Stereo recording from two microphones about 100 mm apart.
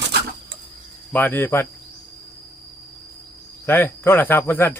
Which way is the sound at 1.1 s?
20° left (ahead or behind).